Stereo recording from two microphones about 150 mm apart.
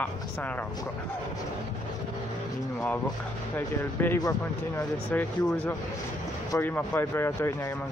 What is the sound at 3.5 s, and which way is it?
Speech, 15° left (ahead or behind).